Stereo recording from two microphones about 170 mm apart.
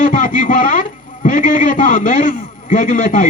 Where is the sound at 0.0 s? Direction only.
50° left (ahead or behind).